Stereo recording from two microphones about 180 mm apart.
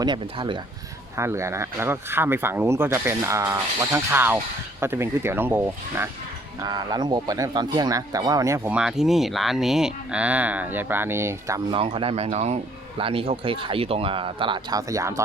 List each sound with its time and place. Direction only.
0.0 s speech: 25° right (ahead or behind)
1.1 s speech: 15° right (ahead or behind)
11.7 s speech: 30° right (ahead or behind)